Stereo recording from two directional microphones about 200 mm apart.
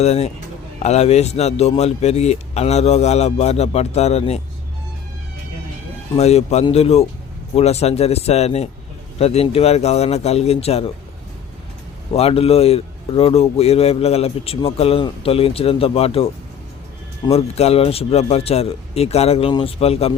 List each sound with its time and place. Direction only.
0.0 s a man's voice: 30° left (ahead or behind)
6.1 s a man's voice: 30° left (ahead or behind)
12.1 s a man's voice: 30° left (ahead or behind)
17.3 s a man's voice: 30° left (ahead or behind)